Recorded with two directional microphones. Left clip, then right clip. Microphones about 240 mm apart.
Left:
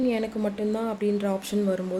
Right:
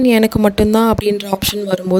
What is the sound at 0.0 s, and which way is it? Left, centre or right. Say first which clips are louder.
Speech: right 14 dB; right.